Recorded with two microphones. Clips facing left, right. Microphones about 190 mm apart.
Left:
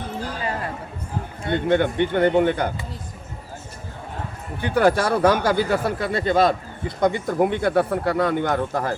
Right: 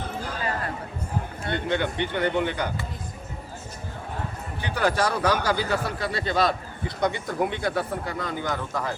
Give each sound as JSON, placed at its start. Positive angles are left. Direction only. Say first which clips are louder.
{"t": 1.5, "sound": "speech", "louder": "left 7 dB", "side_deg": 50}
{"t": 4.6, "sound": "speech", "louder": "left 6 dB", "side_deg": 55}